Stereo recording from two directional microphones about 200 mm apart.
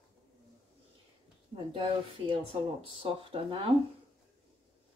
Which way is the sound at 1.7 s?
25° right (ahead or behind).